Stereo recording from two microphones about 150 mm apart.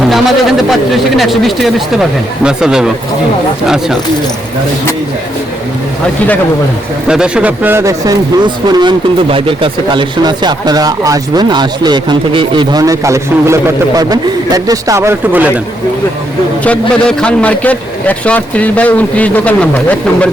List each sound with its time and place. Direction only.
0.1 s a man's voice: centre (ahead or behind)
7.1 s a man's voice: 5° right (ahead or behind)
16.6 s a man's voice: 5° left (ahead or behind)